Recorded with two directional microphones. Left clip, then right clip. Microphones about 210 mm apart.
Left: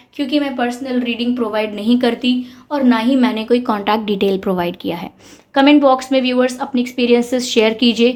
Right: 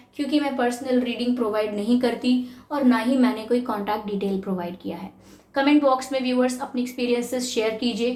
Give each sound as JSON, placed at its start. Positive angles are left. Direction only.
{"t": 0.2, "sound": "a woman's voice", "side_deg": 30}